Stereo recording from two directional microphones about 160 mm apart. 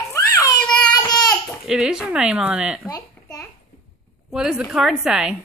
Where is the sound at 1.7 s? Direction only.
5° right (ahead or behind).